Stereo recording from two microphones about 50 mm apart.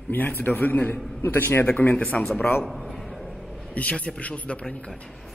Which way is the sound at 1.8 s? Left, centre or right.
Left.